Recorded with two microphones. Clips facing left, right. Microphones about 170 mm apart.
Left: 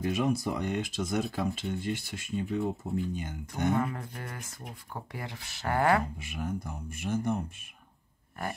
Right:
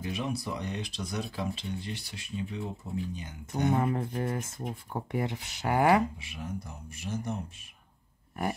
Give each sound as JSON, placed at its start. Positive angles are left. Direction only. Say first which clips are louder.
{"t": 0.0, "sound": "speech", "louder": "left 5 dB", "side_deg": 50}
{"t": 3.8, "sound": "speech", "louder": "right 6 dB", "side_deg": -25}
{"t": 6.1, "sound": "speech", "louder": "left 4 dB", "side_deg": 50}